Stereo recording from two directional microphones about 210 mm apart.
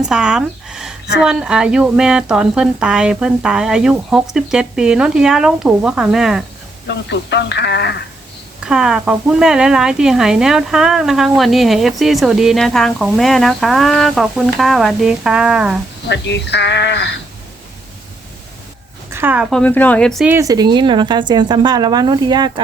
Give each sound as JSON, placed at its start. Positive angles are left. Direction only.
{"t": 0.0, "sound": "a sound", "side_deg": -5}
{"t": 1.2, "sound": "speech", "side_deg": -5}
{"t": 6.8, "sound": "speech", "side_deg": 55}
{"t": 8.6, "sound": "speech", "side_deg": -5}
{"t": 16.0, "sound": "speech", "side_deg": 55}
{"t": 19.1, "sound": "speech", "side_deg": -10}
{"t": 20.3, "sound": "speech", "side_deg": -15}